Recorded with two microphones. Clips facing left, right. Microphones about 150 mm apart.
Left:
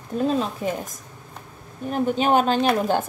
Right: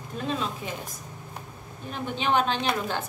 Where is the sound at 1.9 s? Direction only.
45° left (ahead or behind).